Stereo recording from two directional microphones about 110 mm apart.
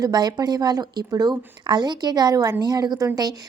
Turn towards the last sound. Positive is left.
turn(degrees=-35)  # may be behind; listen again after turning